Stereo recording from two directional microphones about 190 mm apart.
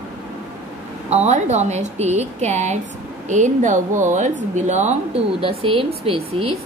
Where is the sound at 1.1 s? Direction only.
35° right (ahead or behind).